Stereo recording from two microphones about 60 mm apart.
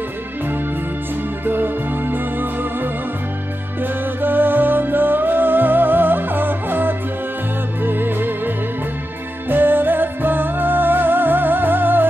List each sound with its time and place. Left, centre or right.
1.4 s music: right
4.2 s music: right
9.5 s music: right